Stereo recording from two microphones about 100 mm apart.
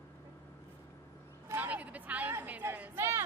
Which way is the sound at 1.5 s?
20° right (ahead or behind).